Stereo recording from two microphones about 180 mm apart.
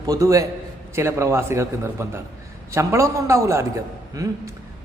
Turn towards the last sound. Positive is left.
turn(degrees=-20)  # may be behind; listen again after turning